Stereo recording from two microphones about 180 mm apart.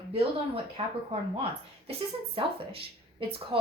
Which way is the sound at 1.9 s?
30° right (ahead or behind).